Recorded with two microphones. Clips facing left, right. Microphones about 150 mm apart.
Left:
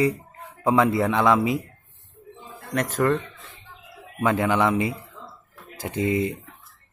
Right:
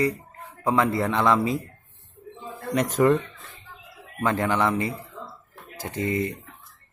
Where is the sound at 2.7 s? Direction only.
Centre (ahead or behind).